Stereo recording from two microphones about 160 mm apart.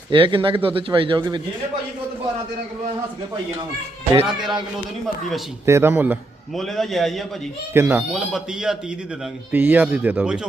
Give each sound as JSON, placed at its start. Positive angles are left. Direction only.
{"t": 0.1, "sound": "speech", "side_deg": -30}
{"t": 4.3, "sound": "a man's voice", "side_deg": -5}
{"t": 5.6, "sound": "speech", "side_deg": -15}
{"t": 6.6, "sound": "a man's voice", "side_deg": 0}
{"t": 7.7, "sound": "speech", "side_deg": -15}
{"t": 8.1, "sound": "a man's voice", "side_deg": -5}